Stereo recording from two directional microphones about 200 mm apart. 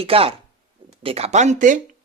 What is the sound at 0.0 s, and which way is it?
Speech, 30° right (ahead or behind).